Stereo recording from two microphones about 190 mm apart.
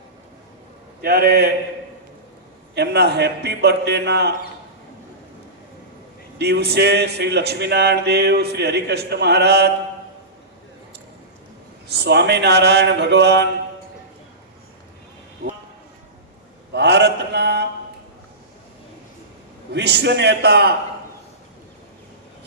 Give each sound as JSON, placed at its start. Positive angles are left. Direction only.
{"t": 1.0, "sound": "speech", "side_deg": -55}
{"t": 2.7, "sound": "speech", "side_deg": -60}
{"t": 6.4, "sound": "speech", "side_deg": -60}
{"t": 11.9, "sound": "speech", "side_deg": -60}
{"t": 16.7, "sound": "mantra", "side_deg": -60}
{"t": 19.7, "sound": "speech", "side_deg": -65}